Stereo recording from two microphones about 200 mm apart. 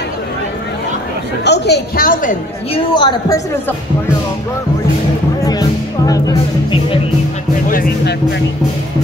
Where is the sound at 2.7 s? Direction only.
20° left (ahead or behind).